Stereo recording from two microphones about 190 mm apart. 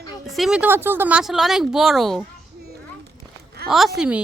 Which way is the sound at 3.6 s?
55° right (ahead or behind).